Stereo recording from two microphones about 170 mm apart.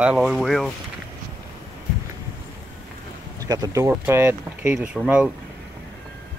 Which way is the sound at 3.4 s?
20° right (ahead or behind).